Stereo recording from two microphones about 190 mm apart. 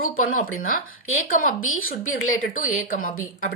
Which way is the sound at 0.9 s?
90° left.